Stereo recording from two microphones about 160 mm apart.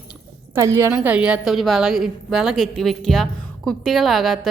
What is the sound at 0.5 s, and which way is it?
A woman's voice, 15° right (ahead or behind).